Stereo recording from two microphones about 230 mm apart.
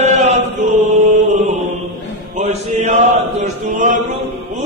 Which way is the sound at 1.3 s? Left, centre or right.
Right.